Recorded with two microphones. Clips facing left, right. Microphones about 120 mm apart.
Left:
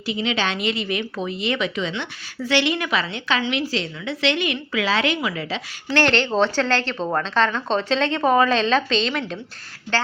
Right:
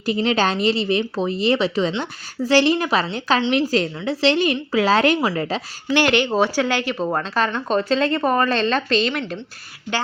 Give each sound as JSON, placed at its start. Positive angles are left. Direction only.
{"t": 0.0, "sound": "a woman's voice", "side_deg": -40}
{"t": 5.9, "sound": "a woman's voice", "side_deg": -15}